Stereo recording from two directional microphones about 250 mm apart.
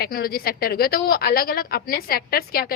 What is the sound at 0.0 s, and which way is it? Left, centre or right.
A woman's voice, left.